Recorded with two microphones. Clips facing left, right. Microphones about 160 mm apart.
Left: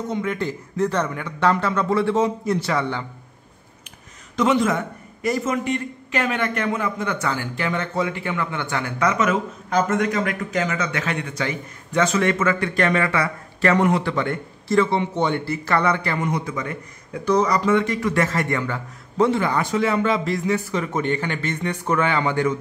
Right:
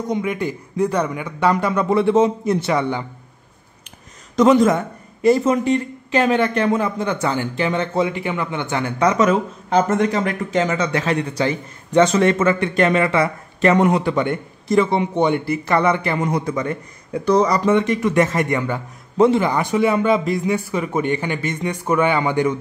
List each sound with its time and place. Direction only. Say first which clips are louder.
0.1 s speech: right 4 dB; 15° right (ahead or behind)
4.4 s speech: right 6 dB; 40° right (ahead or behind); by 16.2 s 20° right (ahead or behind)
16.2 s speech: right 4 dB; 40° right (ahead or behind); by 22.6 s 15° right (ahead or behind)